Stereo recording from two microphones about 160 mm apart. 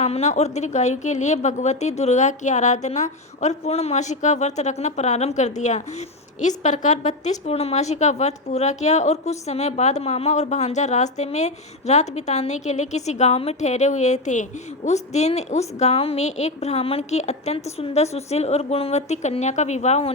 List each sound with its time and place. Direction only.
0.0 s a woman's voice: 45° left (ahead or behind)